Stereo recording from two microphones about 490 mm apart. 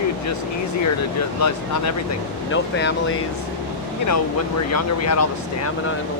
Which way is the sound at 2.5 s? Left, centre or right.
Left.